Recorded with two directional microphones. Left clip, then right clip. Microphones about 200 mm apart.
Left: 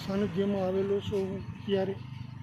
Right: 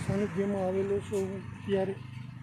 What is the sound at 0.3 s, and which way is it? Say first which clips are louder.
Speech: left 1 dB; 5° left (ahead or behind).